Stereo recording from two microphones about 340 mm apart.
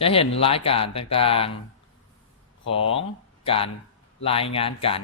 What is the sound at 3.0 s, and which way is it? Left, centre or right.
Speech, centre.